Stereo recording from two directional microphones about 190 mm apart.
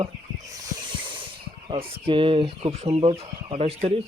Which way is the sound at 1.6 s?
25° right (ahead or behind).